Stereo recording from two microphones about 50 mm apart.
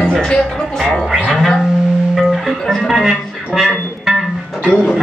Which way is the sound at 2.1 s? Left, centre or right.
Centre.